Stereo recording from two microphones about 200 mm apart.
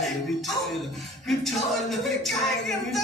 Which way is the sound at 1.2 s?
Centre (ahead or behind).